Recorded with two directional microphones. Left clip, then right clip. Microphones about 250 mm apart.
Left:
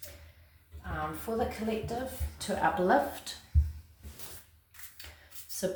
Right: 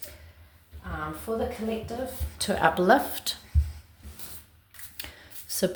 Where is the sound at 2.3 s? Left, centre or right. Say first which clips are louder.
Right 6 dB; right.